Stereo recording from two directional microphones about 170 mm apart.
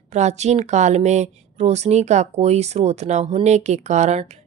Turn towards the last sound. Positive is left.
turn(degrees=-40)  # may be behind; listen again after turning